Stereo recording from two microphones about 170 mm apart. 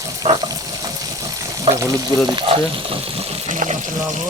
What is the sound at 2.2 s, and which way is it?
Speech, 30° right (ahead or behind).